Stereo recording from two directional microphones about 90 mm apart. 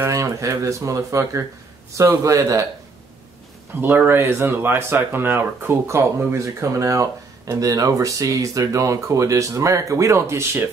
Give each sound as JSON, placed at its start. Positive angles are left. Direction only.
{"t": 0.0, "sound": "speech", "side_deg": -35}
{"t": 3.8, "sound": "speech", "side_deg": -25}